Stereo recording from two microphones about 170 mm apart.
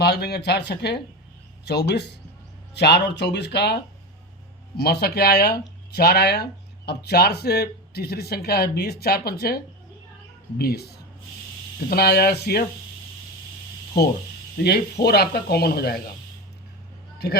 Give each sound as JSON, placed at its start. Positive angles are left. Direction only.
{"t": 0.0, "sound": "speech", "side_deg": 70}
{"t": 4.8, "sound": "speech", "side_deg": 70}
{"t": 10.6, "sound": "speech", "side_deg": 70}
{"t": 15.0, "sound": "speech", "side_deg": 70}